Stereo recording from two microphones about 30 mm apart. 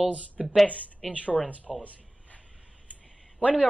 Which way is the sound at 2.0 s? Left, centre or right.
Left.